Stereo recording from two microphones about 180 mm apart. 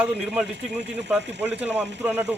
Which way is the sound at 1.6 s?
10° right (ahead or behind).